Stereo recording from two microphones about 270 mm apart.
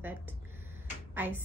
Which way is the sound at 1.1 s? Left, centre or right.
Centre.